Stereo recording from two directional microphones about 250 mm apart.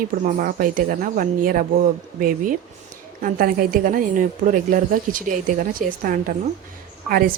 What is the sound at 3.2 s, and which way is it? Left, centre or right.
Speech, right.